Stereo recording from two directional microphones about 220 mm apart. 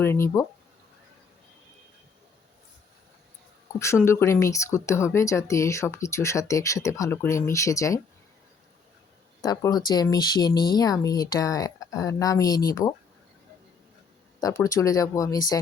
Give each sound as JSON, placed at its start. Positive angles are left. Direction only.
{"t": 0.0, "sound": "speech", "side_deg": 10}
{"t": 3.7, "sound": "speech", "side_deg": 15}
{"t": 9.4, "sound": "speech", "side_deg": 15}
{"t": 14.4, "sound": "speech", "side_deg": 15}